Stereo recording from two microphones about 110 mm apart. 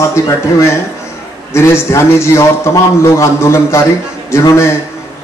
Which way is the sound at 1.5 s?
25° left (ahead or behind).